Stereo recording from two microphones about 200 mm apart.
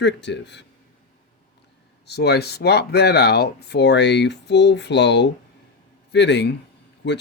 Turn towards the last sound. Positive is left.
turn(degrees=60)  # may be behind; listen again after turning